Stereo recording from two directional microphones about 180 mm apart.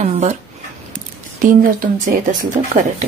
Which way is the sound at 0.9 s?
45° right (ahead or behind).